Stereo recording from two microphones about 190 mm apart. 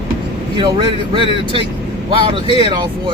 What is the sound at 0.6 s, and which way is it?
A man's voice, 25° right (ahead or behind).